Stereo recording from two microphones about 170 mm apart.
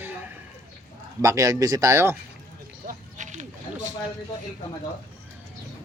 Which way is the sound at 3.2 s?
45° right (ahead or behind).